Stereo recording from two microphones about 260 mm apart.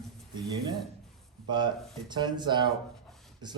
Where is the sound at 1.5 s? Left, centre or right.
Centre.